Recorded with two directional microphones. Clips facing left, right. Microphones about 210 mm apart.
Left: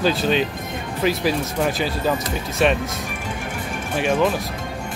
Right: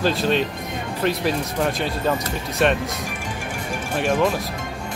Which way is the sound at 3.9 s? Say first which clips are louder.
Left 1 dB; centre (ahead or behind).